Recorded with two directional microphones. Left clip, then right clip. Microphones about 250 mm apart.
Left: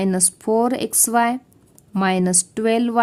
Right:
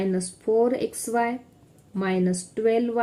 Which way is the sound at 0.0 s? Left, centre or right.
Left.